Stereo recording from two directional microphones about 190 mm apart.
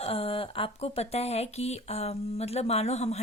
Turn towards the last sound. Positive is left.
turn(degrees=35)  # may be behind; listen again after turning